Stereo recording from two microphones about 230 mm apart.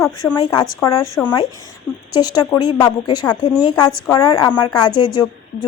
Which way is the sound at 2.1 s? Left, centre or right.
Centre.